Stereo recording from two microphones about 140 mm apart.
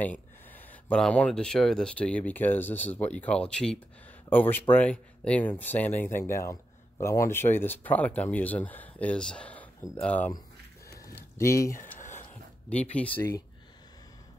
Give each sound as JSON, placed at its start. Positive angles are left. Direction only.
{"t": 0.0, "sound": "speech", "side_deg": 10}
{"t": 11.3, "sound": "speech", "side_deg": 20}
{"t": 12.6, "sound": "speech", "side_deg": 10}